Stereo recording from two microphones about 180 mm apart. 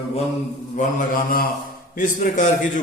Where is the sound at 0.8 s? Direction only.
50° left (ahead or behind).